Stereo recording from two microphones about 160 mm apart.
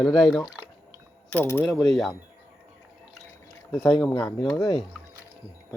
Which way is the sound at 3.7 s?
Centre (ahead or behind).